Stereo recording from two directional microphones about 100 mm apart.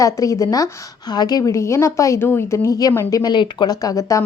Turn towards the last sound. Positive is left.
turn(degrees=35)  # may be behind; listen again after turning